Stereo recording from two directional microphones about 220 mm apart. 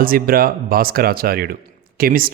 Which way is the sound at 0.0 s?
40° right (ahead or behind).